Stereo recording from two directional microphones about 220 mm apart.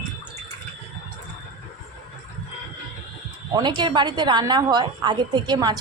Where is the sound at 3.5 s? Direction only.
20° right (ahead or behind).